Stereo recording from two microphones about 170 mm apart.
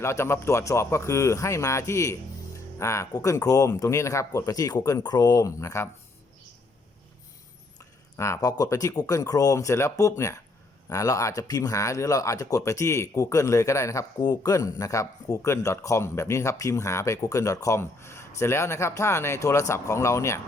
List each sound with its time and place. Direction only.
0.0 s speech: 15° left (ahead or behind)
7.8 s speech: 15° left (ahead or behind)